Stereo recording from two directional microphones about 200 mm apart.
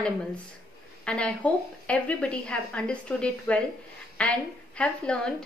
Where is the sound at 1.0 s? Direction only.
5° left (ahead or behind).